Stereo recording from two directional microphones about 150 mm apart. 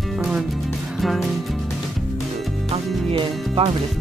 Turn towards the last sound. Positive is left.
turn(degrees=-35)  # may be behind; listen again after turning